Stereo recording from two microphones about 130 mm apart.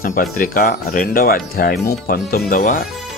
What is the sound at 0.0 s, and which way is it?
Speech, 90° left.